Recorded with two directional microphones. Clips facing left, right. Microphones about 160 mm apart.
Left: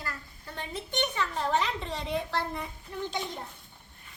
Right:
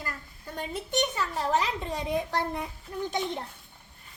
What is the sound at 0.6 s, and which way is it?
A child's voice, 5° right (ahead or behind).